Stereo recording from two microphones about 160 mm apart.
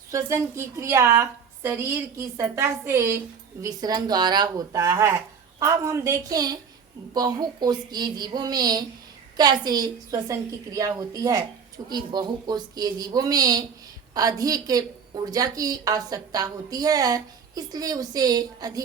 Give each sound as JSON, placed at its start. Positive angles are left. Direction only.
{"t": 0.1, "sound": "a woman's voice", "side_deg": -20}